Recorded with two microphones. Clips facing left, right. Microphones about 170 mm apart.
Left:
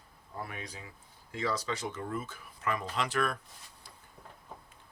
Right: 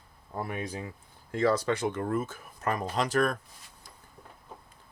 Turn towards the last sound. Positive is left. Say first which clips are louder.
# right 5 dB
turn(degrees=-40)  # may be behind; listen again after turning